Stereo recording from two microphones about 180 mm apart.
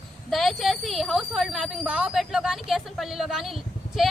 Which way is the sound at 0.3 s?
Centre (ahead or behind).